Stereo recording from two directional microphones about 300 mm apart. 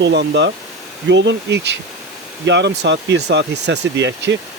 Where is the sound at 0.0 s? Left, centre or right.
Right.